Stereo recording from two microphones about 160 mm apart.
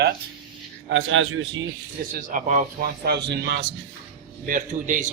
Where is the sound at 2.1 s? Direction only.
55° right (ahead or behind).